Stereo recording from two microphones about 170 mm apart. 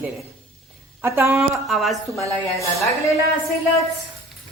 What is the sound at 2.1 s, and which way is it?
Speech, 20° left (ahead or behind).